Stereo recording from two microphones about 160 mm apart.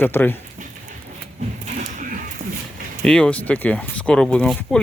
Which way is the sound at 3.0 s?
5° left (ahead or behind).